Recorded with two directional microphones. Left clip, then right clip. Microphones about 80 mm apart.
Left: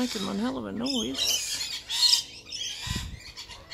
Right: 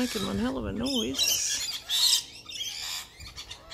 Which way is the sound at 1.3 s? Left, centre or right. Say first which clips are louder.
Even; centre.